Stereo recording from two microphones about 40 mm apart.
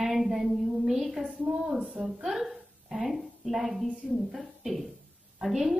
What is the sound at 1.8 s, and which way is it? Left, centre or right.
Speech, right.